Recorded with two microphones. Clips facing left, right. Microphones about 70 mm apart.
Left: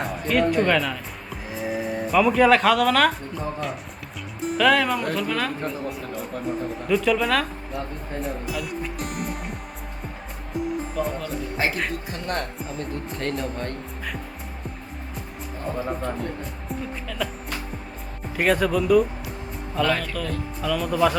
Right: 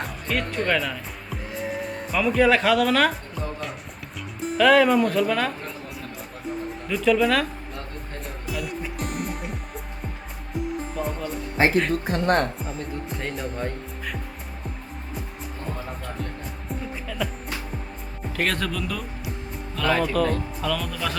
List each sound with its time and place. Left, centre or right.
0.0 s music: centre
4.4 s speech: centre
6.8 s speech: centre
8.2 s music: centre
11.0 s speech: centre
11.5 s speech: right
12.0 s speech: right
12.5 s speech: centre
16.6 s speech: centre
18.3 s speech: centre
19.8 s speech: centre
20.6 s speech: centre